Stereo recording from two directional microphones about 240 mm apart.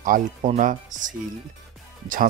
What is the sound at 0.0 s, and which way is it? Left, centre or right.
Speech, right.